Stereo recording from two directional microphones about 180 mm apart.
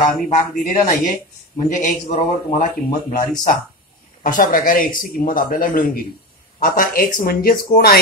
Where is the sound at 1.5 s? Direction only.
45° left (ahead or behind).